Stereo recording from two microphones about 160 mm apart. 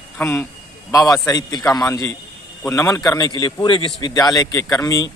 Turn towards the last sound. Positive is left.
turn(degrees=20)  # may be behind; listen again after turning